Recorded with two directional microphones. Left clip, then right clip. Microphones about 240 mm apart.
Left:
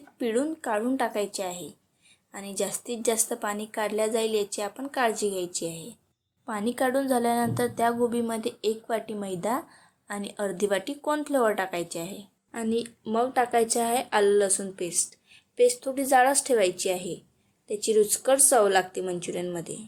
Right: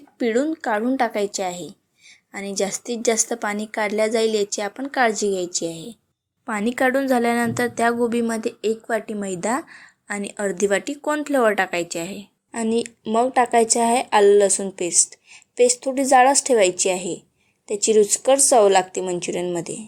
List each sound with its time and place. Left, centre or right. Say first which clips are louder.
0.2 s a woman's voice: right 6 dB; right
8.4 s a woman's voice: right 5 dB; centre
8.9 s a woman's voice: right 6 dB; right